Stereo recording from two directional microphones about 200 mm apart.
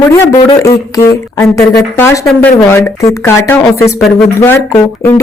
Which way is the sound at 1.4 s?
10° left (ahead or behind).